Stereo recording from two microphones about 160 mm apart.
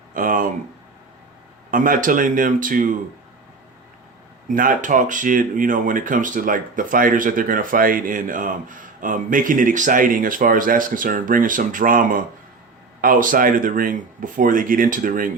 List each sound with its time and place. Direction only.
0.1 s speech: 55° right (ahead or behind)
1.7 s speech: 55° right (ahead or behind)
4.4 s speech: 55° right (ahead or behind)